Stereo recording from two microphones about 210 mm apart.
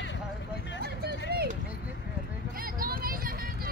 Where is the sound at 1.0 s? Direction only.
50° right (ahead or behind).